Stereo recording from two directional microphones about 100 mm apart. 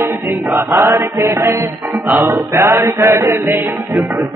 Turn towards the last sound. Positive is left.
turn(degrees=-20)  # may be behind; listen again after turning